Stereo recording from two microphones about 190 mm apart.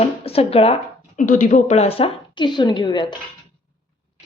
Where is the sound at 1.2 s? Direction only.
40° left (ahead or behind); by 3.0 s 25° left (ahead or behind).